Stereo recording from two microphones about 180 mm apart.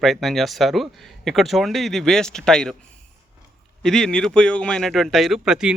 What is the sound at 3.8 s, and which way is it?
Speech, 5° left (ahead or behind).